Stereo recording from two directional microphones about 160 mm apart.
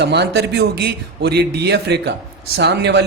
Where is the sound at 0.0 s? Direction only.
90° right.